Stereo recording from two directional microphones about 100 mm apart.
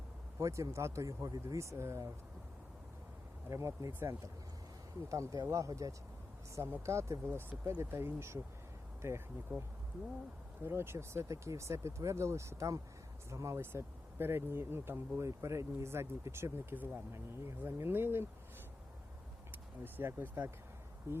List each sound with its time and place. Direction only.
0.3 s speech: 30° right (ahead or behind)
3.5 s speech: 30° right (ahead or behind)
10.6 s speech: 25° right (ahead or behind)
19.5 s speech: 20° right (ahead or behind)